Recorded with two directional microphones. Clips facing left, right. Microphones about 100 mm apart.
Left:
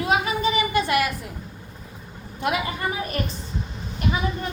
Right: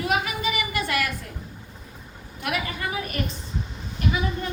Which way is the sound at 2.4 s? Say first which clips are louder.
Left 4 dB; 25° left (ahead or behind).